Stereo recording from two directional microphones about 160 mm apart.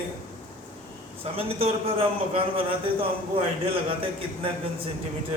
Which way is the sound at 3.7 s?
35° right (ahead or behind).